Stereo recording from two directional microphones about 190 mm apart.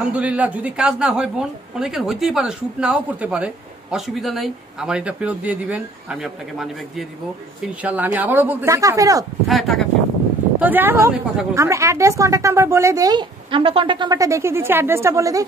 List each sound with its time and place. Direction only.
0.1 s a woman's voice: 10° right (ahead or behind)
9.5 s speech: centre (ahead or behind)
10.6 s a woman's voice: 10° right (ahead or behind)